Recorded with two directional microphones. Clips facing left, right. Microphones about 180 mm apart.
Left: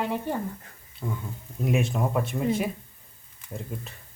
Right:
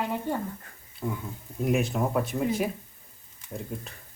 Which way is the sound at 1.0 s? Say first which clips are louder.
Right 1 dB; centre (ahead or behind).